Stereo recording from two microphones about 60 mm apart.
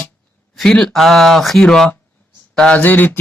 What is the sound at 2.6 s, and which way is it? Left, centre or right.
Speech, left.